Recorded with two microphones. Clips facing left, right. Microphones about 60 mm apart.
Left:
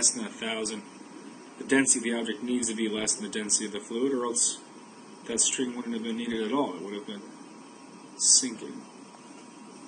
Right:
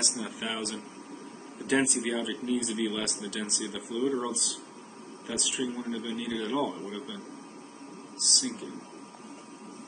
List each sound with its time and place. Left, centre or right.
0.0 s speech: centre
2.8 s speech: centre
3.9 s speech: left
4.3 s speech: centre
5.7 s speech: left
6.0 s speech: centre
8.2 s speech: centre